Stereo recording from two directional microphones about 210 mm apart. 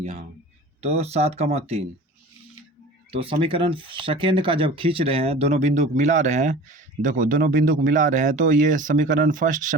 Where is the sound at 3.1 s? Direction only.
25° right (ahead or behind).